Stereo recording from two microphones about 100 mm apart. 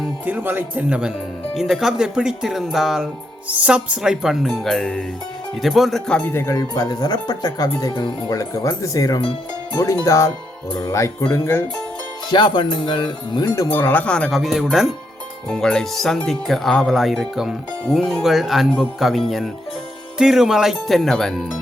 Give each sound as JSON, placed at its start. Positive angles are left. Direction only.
{"t": 0.3, "sound": "speech", "side_deg": -20}
{"t": 6.1, "sound": "speech", "side_deg": 20}
{"t": 12.3, "sound": "speech", "side_deg": 50}
{"t": 13.7, "sound": "speech", "side_deg": 20}
{"t": 14.3, "sound": "speech", "side_deg": 0}